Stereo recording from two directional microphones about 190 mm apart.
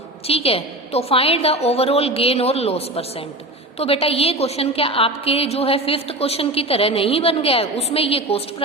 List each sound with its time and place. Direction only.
0.3 s a woman's voice: 30° left (ahead or behind)